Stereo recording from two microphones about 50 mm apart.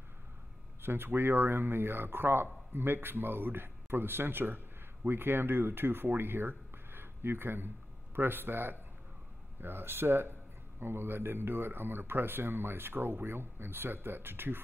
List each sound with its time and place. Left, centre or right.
0.8 s speech: right